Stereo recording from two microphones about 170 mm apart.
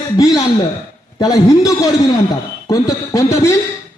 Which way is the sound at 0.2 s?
20° left (ahead or behind).